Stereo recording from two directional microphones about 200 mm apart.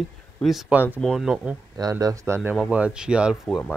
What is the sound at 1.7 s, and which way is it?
Speech, 20° right (ahead or behind).